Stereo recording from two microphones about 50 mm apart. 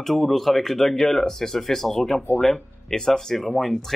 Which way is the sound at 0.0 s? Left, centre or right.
Centre.